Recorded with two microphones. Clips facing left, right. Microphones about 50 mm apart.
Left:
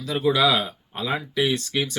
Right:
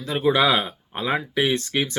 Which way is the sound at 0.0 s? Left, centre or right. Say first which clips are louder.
Right 1 dB; right.